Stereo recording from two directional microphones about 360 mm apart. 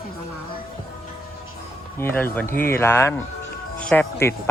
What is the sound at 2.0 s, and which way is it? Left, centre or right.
Speech, centre.